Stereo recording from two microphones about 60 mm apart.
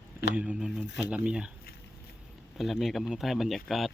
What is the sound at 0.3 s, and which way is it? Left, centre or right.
Speech, right.